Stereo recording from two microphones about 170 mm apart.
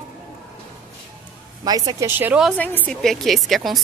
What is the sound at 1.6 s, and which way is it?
Speech, 20° right (ahead or behind).